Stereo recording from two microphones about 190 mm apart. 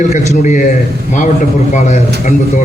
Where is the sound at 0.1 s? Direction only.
40° left (ahead or behind).